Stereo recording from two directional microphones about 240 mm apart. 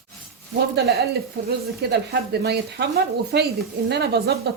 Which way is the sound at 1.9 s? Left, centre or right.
Right.